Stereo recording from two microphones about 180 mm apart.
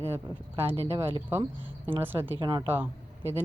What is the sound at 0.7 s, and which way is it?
Speech, 35° right (ahead or behind).